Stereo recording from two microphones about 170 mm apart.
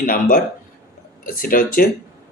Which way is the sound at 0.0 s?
55° left (ahead or behind).